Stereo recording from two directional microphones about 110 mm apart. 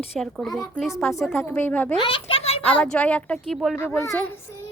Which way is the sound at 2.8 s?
10° left (ahead or behind).